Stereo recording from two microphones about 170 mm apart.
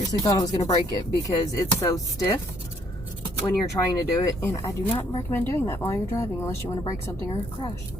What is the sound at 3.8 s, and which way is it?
Speech, 20° left (ahead or behind).